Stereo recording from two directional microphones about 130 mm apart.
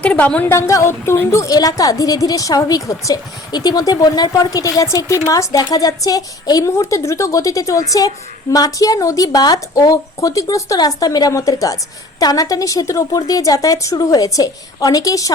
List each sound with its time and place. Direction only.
0.0 s speech: 10° left (ahead or behind)
0.5 s a woman's voice: 20° left (ahead or behind)